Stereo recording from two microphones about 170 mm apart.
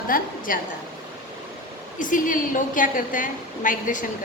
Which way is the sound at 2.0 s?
50° left (ahead or behind).